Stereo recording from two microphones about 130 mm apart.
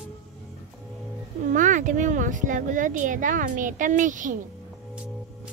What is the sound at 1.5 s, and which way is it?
Speech, 80° right.